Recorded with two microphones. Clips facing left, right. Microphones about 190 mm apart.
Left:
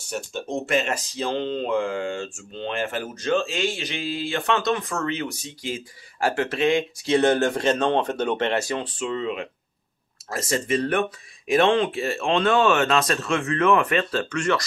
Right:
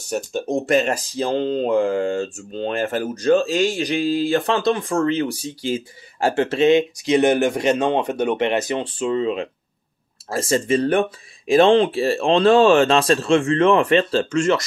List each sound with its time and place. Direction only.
0.1 s speech: 40° right (ahead or behind); by 8.8 s 20° right (ahead or behind)
9.0 s speech: 30° right (ahead or behind)